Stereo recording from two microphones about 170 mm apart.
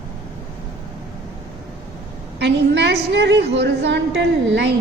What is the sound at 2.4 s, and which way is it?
A woman's voice, 90° right.